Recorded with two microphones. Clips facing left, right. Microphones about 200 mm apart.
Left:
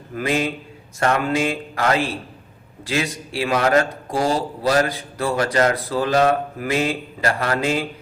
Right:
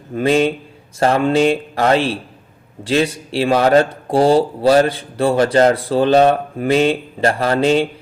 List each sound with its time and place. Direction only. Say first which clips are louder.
0.1 s a man's voice: right 7 dB; 30° right (ahead or behind)